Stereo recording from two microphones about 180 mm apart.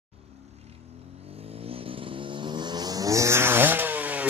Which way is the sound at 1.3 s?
35° right (ahead or behind).